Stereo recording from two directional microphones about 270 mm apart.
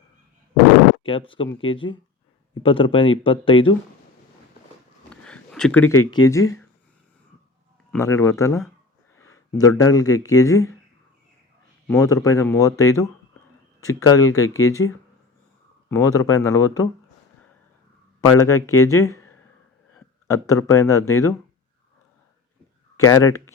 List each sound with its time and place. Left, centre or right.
1.0 s speech: centre
5.0 s a sound: centre
6.1 s speech: centre
7.9 s speech: centre
11.9 s speech: centre
15.9 s speech: centre
18.3 s speech: centre
23.0 s speech: centre